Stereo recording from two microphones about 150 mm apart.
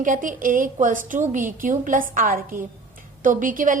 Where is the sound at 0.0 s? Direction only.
60° right (ahead or behind).